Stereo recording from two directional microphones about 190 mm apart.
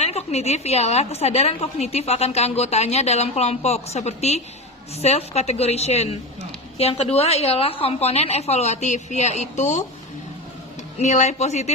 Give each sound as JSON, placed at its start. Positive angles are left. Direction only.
{"t": 0.0, "sound": "a woman's voice", "side_deg": 35}
{"t": 10.9, "sound": "a woman's voice", "side_deg": 40}